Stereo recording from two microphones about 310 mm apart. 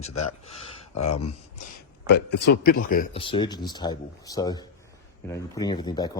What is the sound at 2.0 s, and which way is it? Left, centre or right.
A man's voice, left.